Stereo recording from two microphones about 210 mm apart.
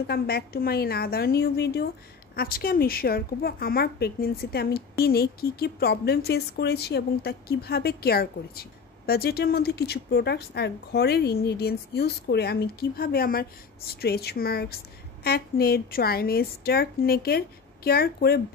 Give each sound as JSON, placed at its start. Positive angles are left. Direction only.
{"t": 0.0, "sound": "a woman's voice", "side_deg": 50}